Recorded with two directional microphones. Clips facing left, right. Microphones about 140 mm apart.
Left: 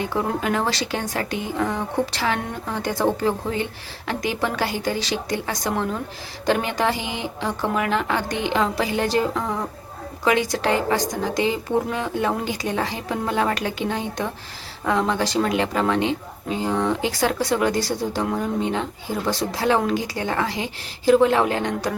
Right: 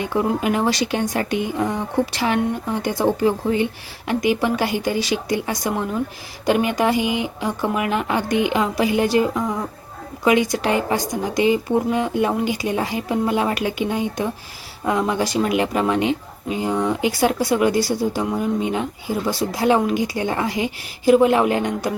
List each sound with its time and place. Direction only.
0.0 s speech: 15° right (ahead or behind)